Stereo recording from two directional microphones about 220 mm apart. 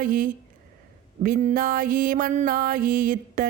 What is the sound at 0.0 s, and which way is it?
Speech, 40° right (ahead or behind).